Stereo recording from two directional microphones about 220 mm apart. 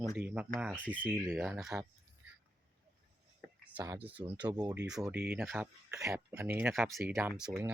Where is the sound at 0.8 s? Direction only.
5° left (ahead or behind).